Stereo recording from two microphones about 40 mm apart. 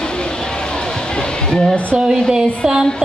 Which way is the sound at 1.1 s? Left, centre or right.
Left.